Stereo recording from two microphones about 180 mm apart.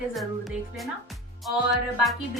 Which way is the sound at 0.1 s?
Centre (ahead or behind).